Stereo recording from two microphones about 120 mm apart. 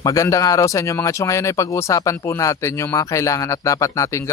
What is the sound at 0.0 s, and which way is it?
Speech, 25° left (ahead or behind).